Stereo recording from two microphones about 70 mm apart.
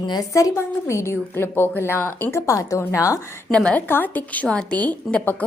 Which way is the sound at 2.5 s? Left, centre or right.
Left.